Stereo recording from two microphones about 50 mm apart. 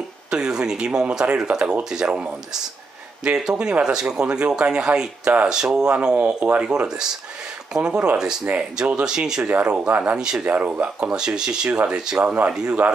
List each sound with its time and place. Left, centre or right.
0.3 s speech: centre
5.5 s speech: centre
6.1 s speech: right
8.5 s speech: right
9.0 s speech: centre
10.1 s speech: centre
10.4 s speech: right
11.0 s speech: centre